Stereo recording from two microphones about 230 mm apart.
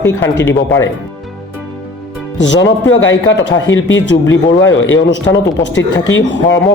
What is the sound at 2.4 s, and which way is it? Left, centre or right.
Speech, left.